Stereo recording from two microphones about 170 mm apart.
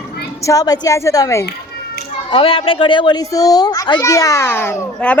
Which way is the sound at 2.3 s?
30° left (ahead or behind).